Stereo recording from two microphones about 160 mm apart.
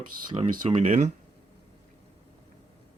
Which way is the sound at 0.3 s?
40° right (ahead or behind).